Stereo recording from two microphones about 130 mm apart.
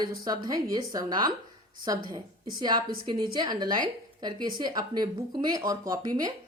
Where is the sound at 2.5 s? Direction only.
35° right (ahead or behind).